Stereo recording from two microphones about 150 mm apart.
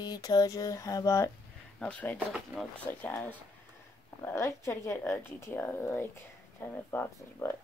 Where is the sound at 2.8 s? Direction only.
10° left (ahead or behind).